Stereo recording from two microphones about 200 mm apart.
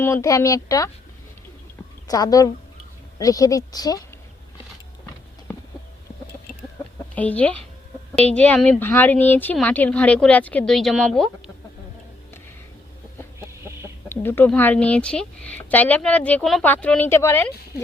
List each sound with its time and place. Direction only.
0.0 s speech: 15° left (ahead or behind)
2.0 s a woman's voice: 20° left (ahead or behind)
7.2 s speech: 5° left (ahead or behind)
14.1 s speech: 10° left (ahead or behind)